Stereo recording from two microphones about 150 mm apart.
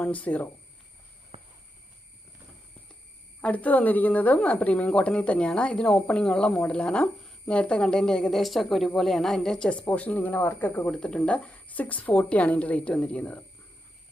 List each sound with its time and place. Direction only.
0.0 s speech: 10° left (ahead or behind)
1.3 s a sound: 45° right (ahead or behind)
3.4 s speech: 10° left (ahead or behind)